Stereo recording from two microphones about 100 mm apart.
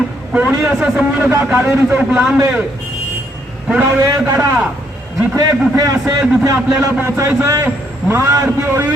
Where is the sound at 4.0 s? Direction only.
35° right (ahead or behind).